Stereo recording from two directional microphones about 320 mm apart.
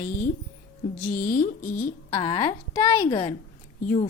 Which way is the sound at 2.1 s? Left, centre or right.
Centre.